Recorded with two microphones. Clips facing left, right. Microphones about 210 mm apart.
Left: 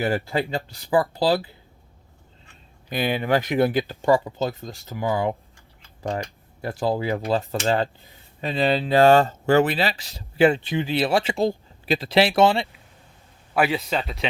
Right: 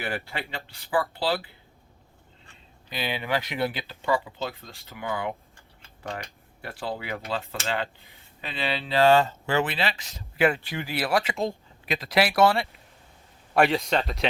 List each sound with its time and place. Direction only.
0.0 s speech: 40° left (ahead or behind)
2.9 s speech: 50° left (ahead or behind)
5.0 s speech: 35° left (ahead or behind)
13.5 s speech: centre (ahead or behind)